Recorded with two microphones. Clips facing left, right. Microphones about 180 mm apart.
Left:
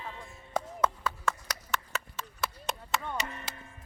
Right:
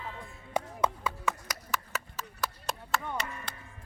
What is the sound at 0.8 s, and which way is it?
Chop, 10° right (ahead or behind).